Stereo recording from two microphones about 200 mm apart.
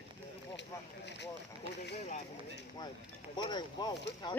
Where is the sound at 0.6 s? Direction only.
60° left (ahead or behind).